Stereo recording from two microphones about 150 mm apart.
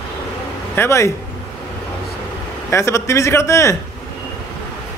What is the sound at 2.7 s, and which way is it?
A man's voice, 20° left (ahead or behind).